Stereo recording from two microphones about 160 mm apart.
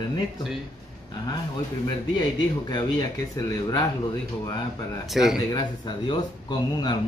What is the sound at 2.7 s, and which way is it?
A man's voice, 25° left (ahead or behind).